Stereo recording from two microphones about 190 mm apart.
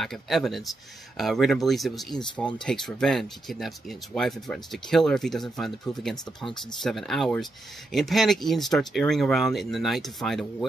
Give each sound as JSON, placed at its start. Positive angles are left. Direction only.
{"t": 0.0, "sound": "speech", "side_deg": 0}